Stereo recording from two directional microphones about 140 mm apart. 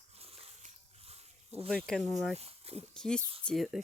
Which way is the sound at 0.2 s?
45° right (ahead or behind).